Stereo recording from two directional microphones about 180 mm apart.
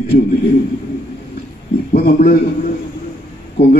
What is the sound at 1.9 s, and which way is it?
Speech, 55° left (ahead or behind).